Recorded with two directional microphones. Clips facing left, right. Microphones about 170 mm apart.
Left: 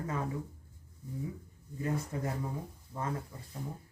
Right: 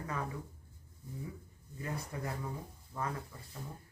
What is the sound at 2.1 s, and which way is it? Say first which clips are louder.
Speech: left 4 dB; 25° left (ahead or behind).